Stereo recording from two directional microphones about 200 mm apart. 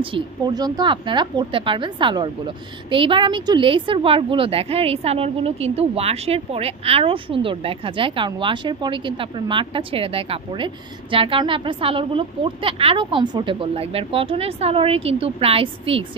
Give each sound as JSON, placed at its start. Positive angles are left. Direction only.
{"t": 0.0, "sound": "a woman's voice", "side_deg": -20}